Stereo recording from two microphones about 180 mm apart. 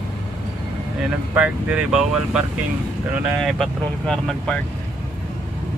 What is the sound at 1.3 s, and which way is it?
Speech, 5° right (ahead or behind).